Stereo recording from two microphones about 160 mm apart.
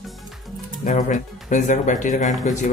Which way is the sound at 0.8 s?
50° left (ahead or behind).